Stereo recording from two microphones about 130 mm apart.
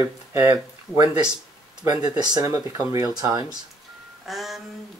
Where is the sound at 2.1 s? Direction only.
30° right (ahead or behind).